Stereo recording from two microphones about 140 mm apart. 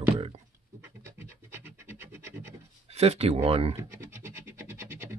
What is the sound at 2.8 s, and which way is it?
Speech, 50° right (ahead or behind).